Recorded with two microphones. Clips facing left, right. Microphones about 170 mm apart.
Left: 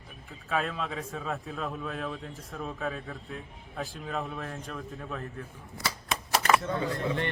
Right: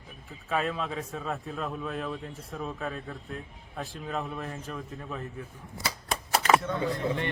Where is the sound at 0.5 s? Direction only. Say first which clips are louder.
Right 1 dB; centre (ahead or behind).